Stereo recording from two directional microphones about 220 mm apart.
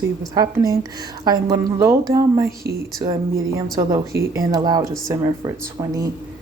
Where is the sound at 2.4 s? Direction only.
45° right (ahead or behind).